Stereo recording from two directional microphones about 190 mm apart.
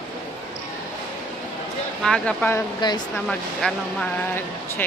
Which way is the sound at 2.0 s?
5° left (ahead or behind).